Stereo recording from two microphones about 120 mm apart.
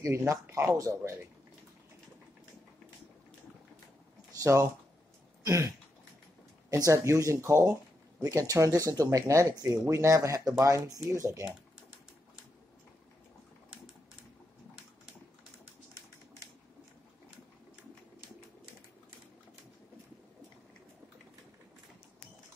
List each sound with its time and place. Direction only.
0.0 s speech: 25° right (ahead or behind)
4.3 s speech: 30° right (ahead or behind)
5.4 s a sound: 25° right (ahead or behind)
6.7 s speech: 25° right (ahead or behind)